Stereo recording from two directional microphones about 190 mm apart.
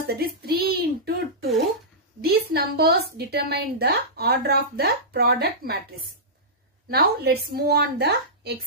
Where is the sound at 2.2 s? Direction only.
55° right (ahead or behind).